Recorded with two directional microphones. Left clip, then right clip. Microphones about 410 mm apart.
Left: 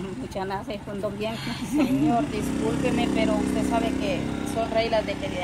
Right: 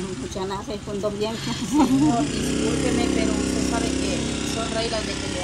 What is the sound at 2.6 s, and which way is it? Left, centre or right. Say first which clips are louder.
Speech: right 2 dB; left.